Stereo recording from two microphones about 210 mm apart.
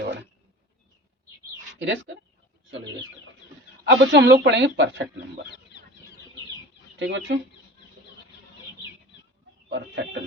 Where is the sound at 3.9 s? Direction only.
60° right (ahead or behind).